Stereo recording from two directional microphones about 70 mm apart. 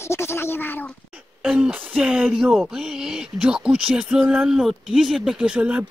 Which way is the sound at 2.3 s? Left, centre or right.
Centre.